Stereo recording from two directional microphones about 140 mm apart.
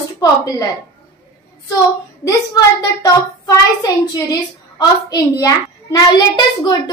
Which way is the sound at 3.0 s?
25° left (ahead or behind).